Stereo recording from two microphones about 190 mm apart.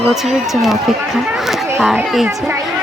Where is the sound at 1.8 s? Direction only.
Centre (ahead or behind).